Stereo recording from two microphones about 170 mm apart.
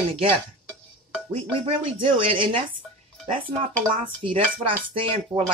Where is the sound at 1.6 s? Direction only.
30° right (ahead or behind).